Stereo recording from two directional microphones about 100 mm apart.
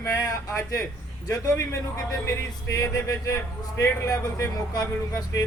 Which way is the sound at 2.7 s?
30° left (ahead or behind).